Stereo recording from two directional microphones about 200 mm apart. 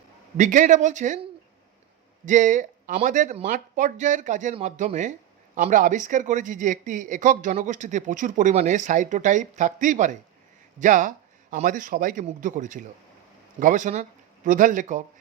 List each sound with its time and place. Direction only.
0.3 s speech: 40° right (ahead or behind)
2.2 s speech: 40° right (ahead or behind)